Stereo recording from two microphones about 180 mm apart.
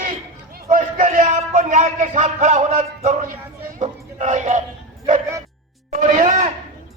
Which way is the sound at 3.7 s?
40° right (ahead or behind).